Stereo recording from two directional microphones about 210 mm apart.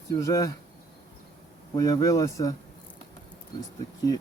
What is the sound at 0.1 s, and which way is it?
Speech, 15° left (ahead or behind).